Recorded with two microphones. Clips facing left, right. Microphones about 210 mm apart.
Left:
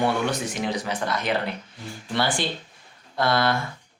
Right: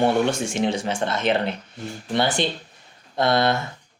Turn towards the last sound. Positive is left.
turn(degrees=-20)  # may be behind; listen again after turning